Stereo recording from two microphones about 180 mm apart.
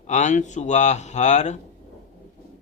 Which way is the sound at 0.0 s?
40° left (ahead or behind).